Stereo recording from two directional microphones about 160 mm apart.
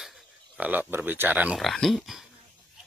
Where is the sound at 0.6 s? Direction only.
10° right (ahead or behind).